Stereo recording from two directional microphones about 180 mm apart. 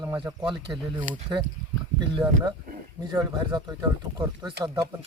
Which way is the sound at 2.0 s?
25° right (ahead or behind).